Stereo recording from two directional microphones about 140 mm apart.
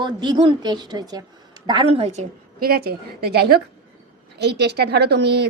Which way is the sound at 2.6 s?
90° right.